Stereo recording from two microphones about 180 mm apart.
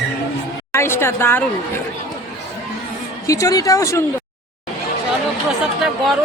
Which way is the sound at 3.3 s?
20° left (ahead or behind).